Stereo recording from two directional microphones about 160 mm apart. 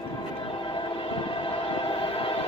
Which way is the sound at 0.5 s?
30° left (ahead or behind).